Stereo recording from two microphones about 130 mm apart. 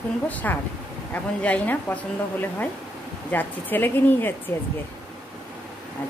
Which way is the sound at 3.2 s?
15° left (ahead or behind).